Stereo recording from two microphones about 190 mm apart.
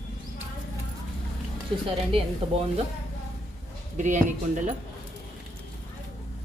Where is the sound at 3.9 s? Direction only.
40° right (ahead or behind).